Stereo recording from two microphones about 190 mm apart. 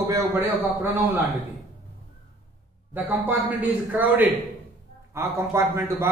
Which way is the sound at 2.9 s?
10° right (ahead or behind).